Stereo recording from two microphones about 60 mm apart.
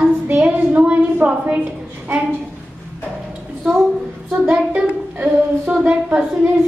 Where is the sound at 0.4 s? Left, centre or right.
Right.